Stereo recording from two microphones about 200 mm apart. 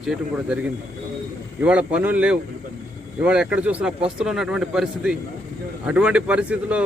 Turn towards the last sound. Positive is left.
turn(degrees=-5)  # may be behind; listen again after turning